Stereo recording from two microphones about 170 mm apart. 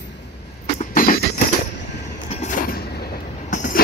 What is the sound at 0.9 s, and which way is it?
Music, 55° left (ahead or behind).